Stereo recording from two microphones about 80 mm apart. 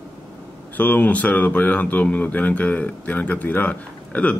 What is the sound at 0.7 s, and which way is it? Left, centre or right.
A man's voice, left.